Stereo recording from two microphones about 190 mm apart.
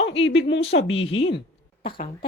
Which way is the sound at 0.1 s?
75° left (ahead or behind).